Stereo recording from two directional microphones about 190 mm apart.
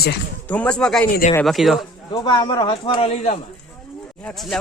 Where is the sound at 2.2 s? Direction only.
25° left (ahead or behind).